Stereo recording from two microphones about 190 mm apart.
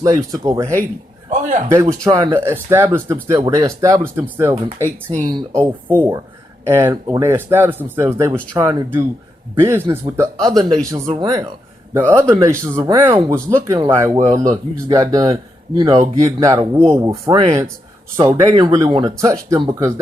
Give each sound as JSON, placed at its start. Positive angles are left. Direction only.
{"t": 0.0, "sound": "speech", "side_deg": -15}
{"t": 1.3, "sound": "a man's voice", "side_deg": -40}
{"t": 1.7, "sound": "speech", "side_deg": -15}
{"t": 5.0, "sound": "speech", "side_deg": -40}
{"t": 5.3, "sound": "speech", "side_deg": -20}
{"t": 9.6, "sound": "speech", "side_deg": -10}